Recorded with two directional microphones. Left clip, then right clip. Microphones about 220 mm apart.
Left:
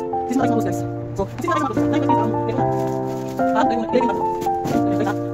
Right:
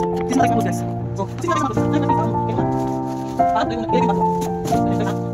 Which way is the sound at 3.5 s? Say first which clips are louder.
Left 1 dB; 20° left (ahead or behind).